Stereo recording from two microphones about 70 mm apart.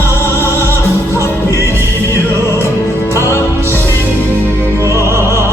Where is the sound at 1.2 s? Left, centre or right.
Left.